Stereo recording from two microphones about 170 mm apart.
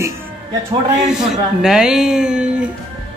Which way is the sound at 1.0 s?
5° right (ahead or behind).